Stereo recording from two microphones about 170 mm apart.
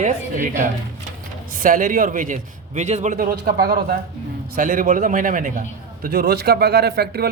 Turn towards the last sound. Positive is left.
turn(degrees=-70)  # may be behind; listen again after turning